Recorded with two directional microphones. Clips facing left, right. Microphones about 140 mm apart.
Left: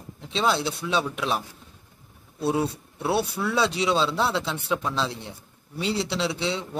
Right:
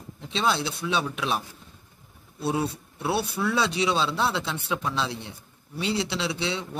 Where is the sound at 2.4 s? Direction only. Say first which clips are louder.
Left 2 dB; 10° right (ahead or behind).